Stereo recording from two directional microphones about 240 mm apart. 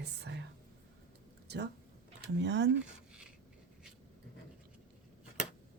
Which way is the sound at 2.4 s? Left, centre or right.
Right.